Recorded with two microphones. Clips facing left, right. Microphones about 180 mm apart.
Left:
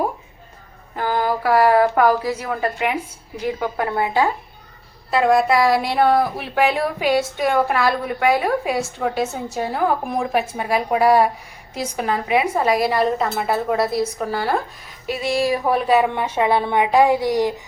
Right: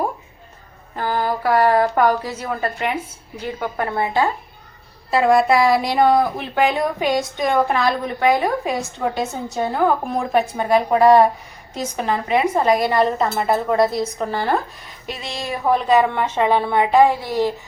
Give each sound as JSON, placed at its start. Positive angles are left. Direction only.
{"t": 0.9, "sound": "mantra", "side_deg": 15}
{"t": 1.5, "sound": "speech", "side_deg": 10}
{"t": 5.1, "sound": "speech", "side_deg": 0}